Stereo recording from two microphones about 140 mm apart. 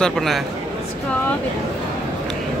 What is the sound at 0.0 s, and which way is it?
Speech, centre (ahead or behind).